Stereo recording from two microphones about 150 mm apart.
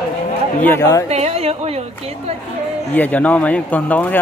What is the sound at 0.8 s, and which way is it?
Speech, 25° left (ahead or behind).